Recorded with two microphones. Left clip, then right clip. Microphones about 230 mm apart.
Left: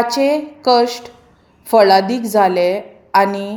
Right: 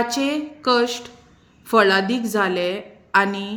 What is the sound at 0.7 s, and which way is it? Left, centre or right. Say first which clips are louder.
Speech: left 6 dB; centre.